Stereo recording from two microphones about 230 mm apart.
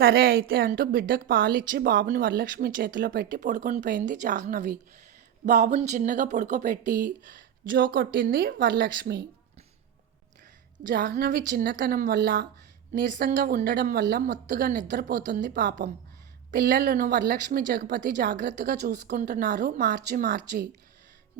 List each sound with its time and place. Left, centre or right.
0.0 s a woman's voice: right
10.8 s a woman's voice: right